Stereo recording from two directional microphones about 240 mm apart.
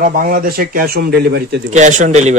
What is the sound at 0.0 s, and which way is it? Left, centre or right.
Speech, right.